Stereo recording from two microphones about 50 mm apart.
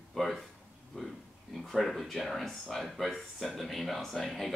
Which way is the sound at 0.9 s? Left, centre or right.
Centre.